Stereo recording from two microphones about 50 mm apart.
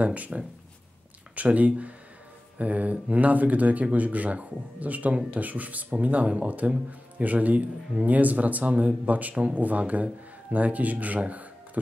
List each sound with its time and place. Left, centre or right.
0.0 s speech: right
1.3 s a man's voice: right